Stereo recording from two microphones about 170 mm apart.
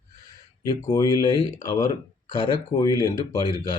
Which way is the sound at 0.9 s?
20° left (ahead or behind).